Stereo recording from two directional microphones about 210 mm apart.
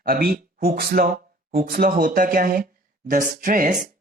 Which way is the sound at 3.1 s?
40° right (ahead or behind).